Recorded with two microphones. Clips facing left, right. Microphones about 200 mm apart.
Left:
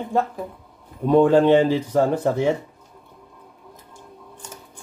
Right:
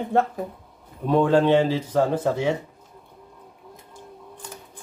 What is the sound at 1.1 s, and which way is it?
Speech, 15° left (ahead or behind).